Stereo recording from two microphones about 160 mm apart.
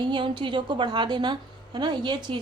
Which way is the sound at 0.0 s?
30° right (ahead or behind).